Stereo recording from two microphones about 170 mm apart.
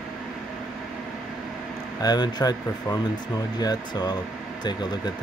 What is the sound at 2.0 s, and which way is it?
Speech, 25° left (ahead or behind).